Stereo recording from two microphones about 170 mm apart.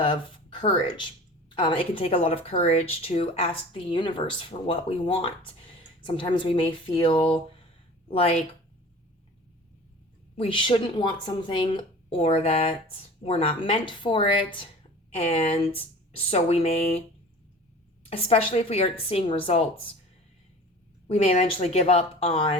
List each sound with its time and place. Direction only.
0.0 s a sound: 30° left (ahead or behind)
0.7 s a woman's voice: 30° left (ahead or behind)
10.3 s a woman's voice: 30° left (ahead or behind)
18.0 s speech: 35° left (ahead or behind)
21.1 s speech: 40° left (ahead or behind)